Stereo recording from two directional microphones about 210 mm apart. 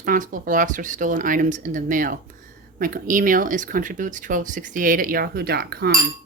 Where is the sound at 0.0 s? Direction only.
40° right (ahead or behind).